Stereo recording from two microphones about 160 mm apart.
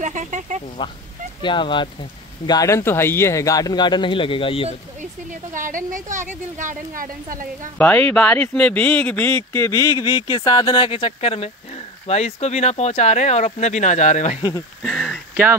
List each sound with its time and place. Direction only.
0.0 s speech: 50° right (ahead or behind)
0.8 s speech: 30° left (ahead or behind)
5.5 s a woman's voice: 55° right (ahead or behind)
7.7 s speech: 10° left (ahead or behind); by 14.4 s 50° left (ahead or behind)
14.8 s a sound: centre (ahead or behind)